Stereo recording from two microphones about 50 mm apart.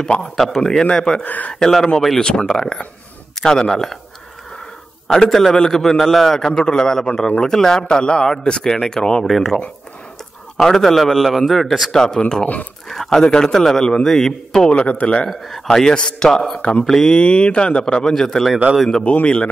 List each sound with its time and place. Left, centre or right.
0.0 s a man's voice: centre
1.2 s speech: left
1.5 s a man's voice: centre
5.0 s a man's voice: centre
10.6 s a man's voice: centre
11.9 s a man's voice: centre
14.7 s a man's voice: left
15.2 s a man's voice: centre
15.8 s a man's voice: centre
17.1 s a man's voice: left; by 18.5 s centre
19.2 s a man's voice: left